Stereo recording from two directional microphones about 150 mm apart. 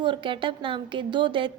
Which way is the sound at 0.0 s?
35° right (ahead or behind).